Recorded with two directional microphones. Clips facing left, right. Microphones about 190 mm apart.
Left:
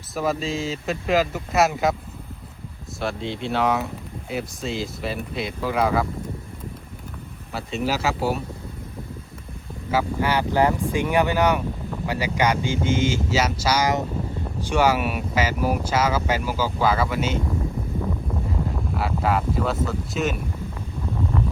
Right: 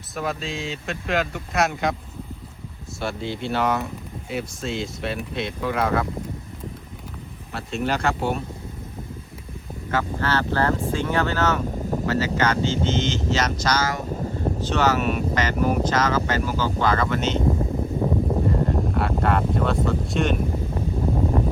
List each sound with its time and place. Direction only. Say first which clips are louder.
0.2 s speech: left 4 dB; centre (ahead or behind)
3.0 s speech: left 1 dB; centre (ahead or behind)
7.5 s speech: even; centre (ahead or behind)
9.9 s speech: left 2 dB; 10° left (ahead or behind)
18.4 s a sound: right 6 dB; centre (ahead or behind)
19.2 s speech: even; centre (ahead or behind)
20.3 s a sound: right 6 dB; 35° right (ahead or behind)